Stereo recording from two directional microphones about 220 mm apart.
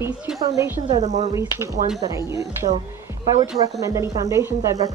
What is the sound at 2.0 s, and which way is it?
Speech, 15° right (ahead or behind).